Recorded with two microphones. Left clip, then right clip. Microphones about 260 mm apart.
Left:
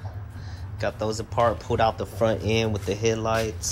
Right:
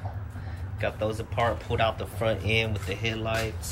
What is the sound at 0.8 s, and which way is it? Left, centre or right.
Speech, centre.